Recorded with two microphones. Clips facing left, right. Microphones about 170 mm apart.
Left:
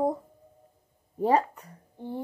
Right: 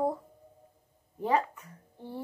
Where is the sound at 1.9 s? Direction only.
15° left (ahead or behind).